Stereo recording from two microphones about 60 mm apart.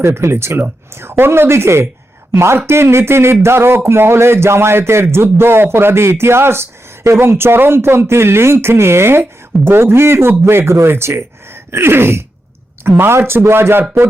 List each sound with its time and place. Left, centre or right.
0.0 s speech: right